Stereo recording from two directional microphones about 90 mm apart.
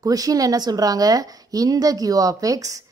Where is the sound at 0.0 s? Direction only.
40° right (ahead or behind).